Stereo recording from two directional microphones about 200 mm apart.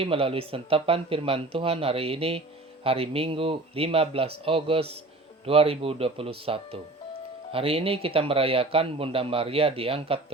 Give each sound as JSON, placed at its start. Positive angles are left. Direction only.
{"t": 0.0, "sound": "speech", "side_deg": -30}